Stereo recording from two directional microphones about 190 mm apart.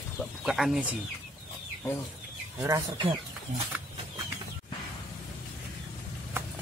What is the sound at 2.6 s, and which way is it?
Speech, 15° right (ahead or behind).